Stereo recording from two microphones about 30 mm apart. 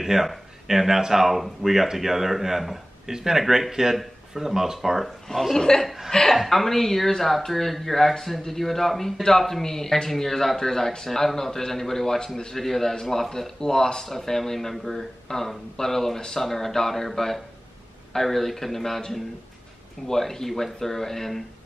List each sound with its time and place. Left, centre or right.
0.0 s speech: centre
5.0 s a woman's voice: centre
5.6 s speech: left
6.0 s a woman's voice: centre